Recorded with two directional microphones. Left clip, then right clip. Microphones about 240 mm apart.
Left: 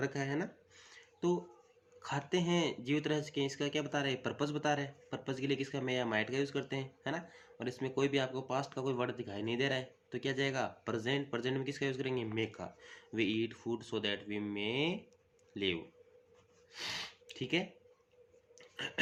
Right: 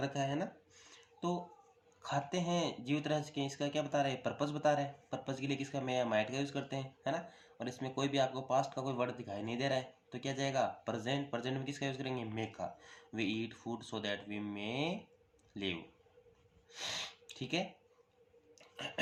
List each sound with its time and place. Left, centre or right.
0.0 s a sound: left
2.0 s speech: left
16.7 s snort: left